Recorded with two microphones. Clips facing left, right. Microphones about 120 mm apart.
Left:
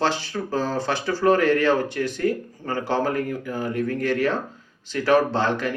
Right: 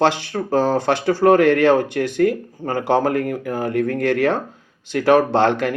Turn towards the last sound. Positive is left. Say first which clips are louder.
# right 6 dB
turn(degrees=-60)  # may be behind; listen again after turning